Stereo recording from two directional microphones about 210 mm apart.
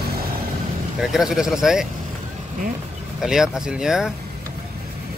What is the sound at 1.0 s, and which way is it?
Speech, centre (ahead or behind).